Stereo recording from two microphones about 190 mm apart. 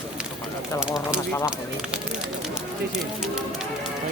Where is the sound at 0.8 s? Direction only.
5° right (ahead or behind).